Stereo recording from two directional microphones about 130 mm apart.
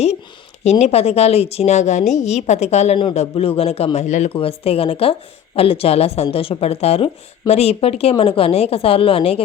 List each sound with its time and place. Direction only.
0.6 s a woman's voice: 55° left (ahead or behind)
3.9 s a woman's voice: 65° left (ahead or behind)
4.4 s speech: 50° left (ahead or behind)